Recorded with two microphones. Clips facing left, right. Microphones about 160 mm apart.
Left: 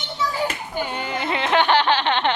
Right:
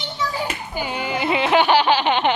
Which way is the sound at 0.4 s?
5° right (ahead or behind).